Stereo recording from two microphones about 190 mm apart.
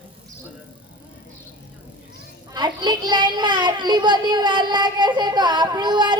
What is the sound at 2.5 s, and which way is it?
A child's voice, 25° right (ahead or behind).